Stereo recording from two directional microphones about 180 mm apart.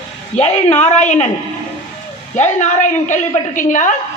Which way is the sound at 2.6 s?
40° left (ahead or behind).